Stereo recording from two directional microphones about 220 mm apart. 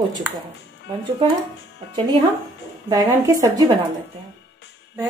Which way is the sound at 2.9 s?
15° right (ahead or behind).